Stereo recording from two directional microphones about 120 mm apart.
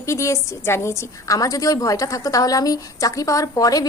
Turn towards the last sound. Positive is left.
turn(degrees=30)  # may be behind; listen again after turning